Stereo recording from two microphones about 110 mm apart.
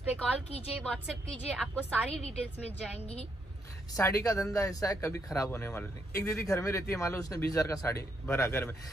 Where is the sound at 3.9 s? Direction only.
30° left (ahead or behind).